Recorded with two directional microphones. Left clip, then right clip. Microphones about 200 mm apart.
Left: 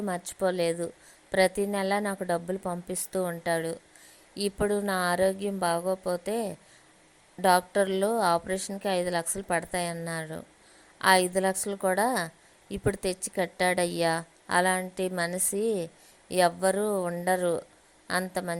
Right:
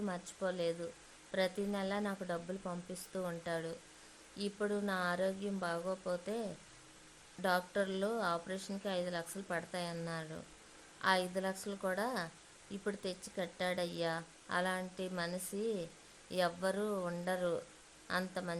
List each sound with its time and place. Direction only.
0.0 s a woman's voice: 30° left (ahead or behind)